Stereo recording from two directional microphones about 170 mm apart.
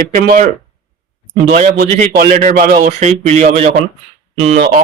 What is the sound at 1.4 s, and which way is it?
Speech, 50° right (ahead or behind).